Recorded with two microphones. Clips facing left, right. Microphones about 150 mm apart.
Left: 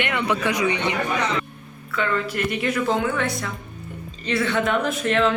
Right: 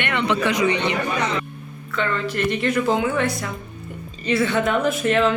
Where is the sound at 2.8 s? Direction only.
Centre (ahead or behind).